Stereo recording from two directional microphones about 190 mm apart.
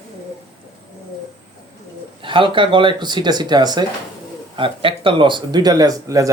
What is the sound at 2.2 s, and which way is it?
A man's voice, 25° right (ahead or behind).